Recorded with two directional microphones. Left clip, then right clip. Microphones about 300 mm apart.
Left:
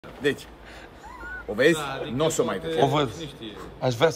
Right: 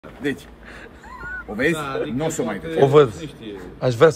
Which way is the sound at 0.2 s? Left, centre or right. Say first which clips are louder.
Left 1 dB; centre.